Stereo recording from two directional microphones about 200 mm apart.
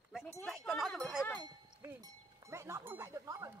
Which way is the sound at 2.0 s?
15° right (ahead or behind).